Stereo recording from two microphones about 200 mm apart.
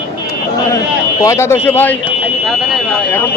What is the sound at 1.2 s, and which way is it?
Speech, 15° left (ahead or behind).